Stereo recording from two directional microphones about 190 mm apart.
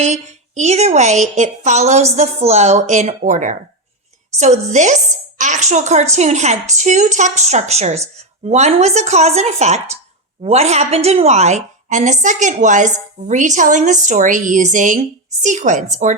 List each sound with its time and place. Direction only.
0.0 s a woman's voice: 35° right (ahead or behind)